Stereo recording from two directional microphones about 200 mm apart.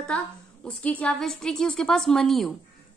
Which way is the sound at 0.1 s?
5° left (ahead or behind).